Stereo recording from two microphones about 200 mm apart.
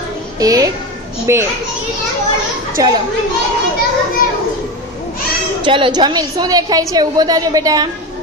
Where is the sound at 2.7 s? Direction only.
20° right (ahead or behind).